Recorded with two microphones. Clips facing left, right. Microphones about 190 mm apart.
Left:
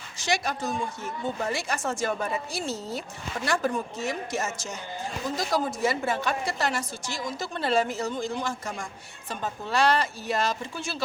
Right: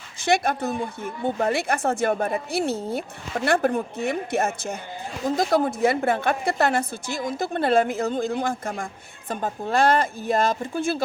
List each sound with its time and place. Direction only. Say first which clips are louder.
0.2 s a woman's voice: right 6 dB; 55° right (ahead or behind)